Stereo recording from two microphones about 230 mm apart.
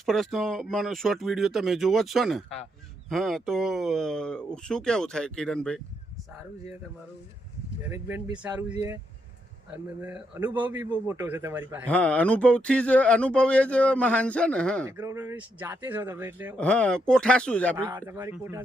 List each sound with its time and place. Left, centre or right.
0.0 s speech: centre
7.9 s a man's voice: centre
9.7 s a man's voice: centre
11.9 s speech: centre
14.8 s a man's voice: centre
16.6 s speech: centre
17.7 s a man's voice: centre